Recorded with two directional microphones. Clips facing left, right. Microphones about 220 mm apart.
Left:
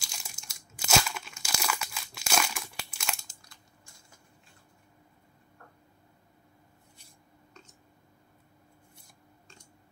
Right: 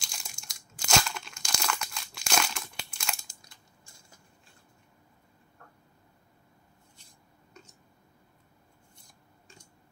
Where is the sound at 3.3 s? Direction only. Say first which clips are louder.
Even; 15° right (ahead or behind).